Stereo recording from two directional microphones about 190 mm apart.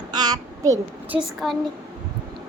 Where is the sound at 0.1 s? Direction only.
20° right (ahead or behind).